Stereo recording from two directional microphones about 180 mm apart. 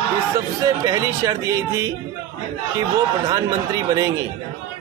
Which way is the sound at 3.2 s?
20° right (ahead or behind).